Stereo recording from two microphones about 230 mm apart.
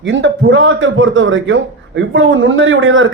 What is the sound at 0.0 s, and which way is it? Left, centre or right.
A man's voice, right.